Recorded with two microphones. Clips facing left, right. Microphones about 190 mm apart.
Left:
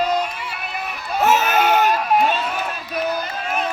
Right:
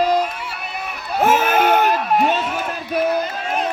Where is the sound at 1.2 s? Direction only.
50° right (ahead or behind).